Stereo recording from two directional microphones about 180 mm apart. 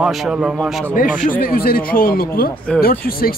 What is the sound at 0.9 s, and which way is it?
Speech, 50° left (ahead or behind).